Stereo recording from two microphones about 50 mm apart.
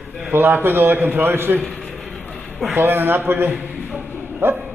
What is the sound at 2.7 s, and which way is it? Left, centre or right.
A man's voice, right.